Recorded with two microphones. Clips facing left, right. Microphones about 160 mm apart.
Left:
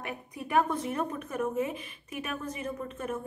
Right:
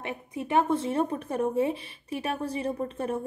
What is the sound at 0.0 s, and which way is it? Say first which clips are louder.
Speech: right 4 dB; 25° right (ahead or behind).